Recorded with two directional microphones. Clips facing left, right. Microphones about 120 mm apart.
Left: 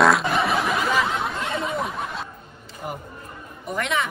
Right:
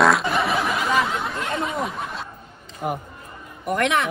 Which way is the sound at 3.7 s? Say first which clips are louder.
Right 4 dB; 60° right (ahead or behind).